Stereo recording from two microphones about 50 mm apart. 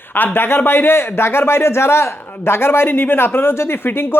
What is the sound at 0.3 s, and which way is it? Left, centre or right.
Speech, left.